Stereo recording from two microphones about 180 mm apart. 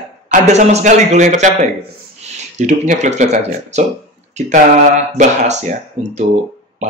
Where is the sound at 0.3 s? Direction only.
40° right (ahead or behind).